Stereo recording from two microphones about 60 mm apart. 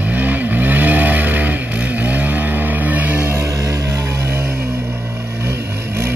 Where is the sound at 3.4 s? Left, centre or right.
Right.